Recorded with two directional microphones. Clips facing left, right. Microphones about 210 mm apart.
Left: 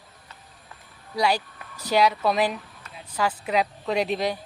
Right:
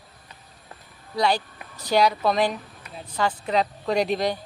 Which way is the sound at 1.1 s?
10° left (ahead or behind).